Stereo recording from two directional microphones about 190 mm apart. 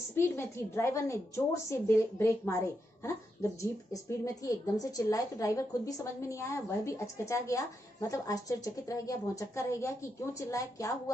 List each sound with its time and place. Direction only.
0.1 s a woman's voice: 15° left (ahead or behind)